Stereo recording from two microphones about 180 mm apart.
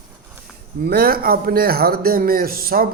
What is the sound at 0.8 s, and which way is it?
A man's voice, 55° right (ahead or behind).